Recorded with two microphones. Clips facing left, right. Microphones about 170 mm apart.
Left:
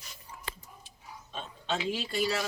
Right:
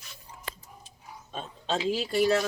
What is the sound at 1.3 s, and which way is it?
Speech, 35° right (ahead or behind).